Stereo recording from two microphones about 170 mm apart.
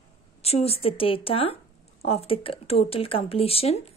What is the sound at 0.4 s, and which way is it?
A woman's voice, 35° left (ahead or behind).